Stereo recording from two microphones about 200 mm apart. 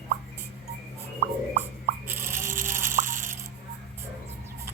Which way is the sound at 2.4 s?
40° right (ahead or behind).